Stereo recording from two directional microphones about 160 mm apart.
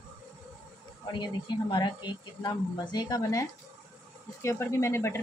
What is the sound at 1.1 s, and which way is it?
Speech, 30° left (ahead or behind).